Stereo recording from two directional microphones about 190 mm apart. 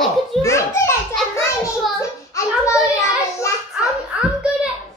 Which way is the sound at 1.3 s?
15° left (ahead or behind).